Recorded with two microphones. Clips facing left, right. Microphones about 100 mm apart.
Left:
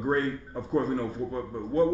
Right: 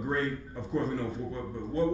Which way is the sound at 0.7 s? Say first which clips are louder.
Left 4 dB; 40° left (ahead or behind).